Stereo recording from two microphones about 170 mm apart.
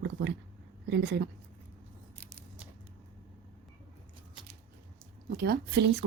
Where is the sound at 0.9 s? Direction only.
90° right.